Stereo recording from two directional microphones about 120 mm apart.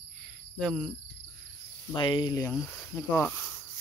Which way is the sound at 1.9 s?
40° left (ahead or behind).